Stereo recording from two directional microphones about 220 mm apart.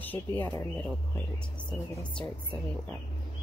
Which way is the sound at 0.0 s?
10° left (ahead or behind).